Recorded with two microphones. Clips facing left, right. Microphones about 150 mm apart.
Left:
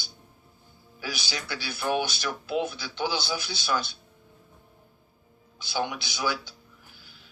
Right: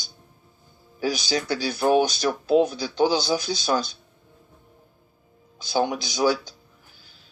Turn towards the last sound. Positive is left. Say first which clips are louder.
# right 8 dB
turn(degrees=-40)  # may be behind; listen again after turning